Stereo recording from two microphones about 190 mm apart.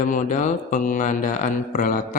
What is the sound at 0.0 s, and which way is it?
Speech, 40° left (ahead or behind).